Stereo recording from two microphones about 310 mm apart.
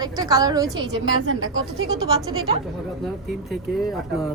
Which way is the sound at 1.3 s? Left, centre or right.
Right.